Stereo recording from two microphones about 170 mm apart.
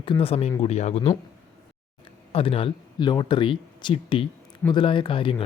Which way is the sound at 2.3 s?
35° left (ahead or behind).